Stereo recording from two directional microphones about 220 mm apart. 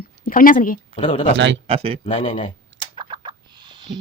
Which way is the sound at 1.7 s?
25° right (ahead or behind).